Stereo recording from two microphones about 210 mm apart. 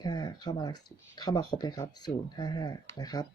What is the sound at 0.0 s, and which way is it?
Speech, 20° left (ahead or behind).